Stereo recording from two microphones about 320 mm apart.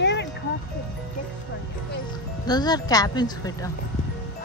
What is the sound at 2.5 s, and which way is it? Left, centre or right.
Speech, centre.